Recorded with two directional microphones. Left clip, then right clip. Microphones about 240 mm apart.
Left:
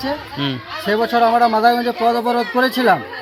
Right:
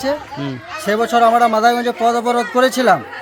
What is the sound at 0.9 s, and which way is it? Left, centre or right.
Speech, right.